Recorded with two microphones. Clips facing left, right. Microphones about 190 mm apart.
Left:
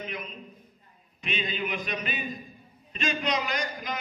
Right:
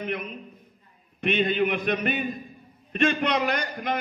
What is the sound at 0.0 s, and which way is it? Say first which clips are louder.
A man's voice: right 6 dB; 60° right (ahead or behind).